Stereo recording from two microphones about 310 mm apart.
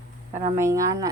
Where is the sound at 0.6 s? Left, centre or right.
Centre.